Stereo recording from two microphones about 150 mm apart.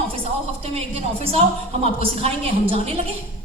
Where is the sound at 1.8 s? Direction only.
40° right (ahead or behind).